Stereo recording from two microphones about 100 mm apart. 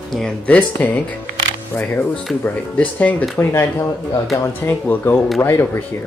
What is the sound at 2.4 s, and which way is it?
Speech, 15° left (ahead or behind).